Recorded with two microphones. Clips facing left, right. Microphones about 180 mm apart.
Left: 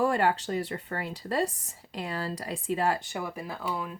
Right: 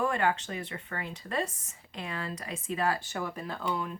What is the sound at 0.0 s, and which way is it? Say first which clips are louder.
Speech: left 3 dB; 35° left (ahead or behind).